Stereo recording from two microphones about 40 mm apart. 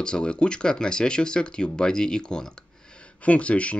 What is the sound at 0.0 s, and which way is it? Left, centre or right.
Speech, left.